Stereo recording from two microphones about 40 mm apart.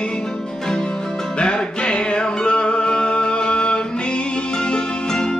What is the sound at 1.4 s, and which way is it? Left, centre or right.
Music, left.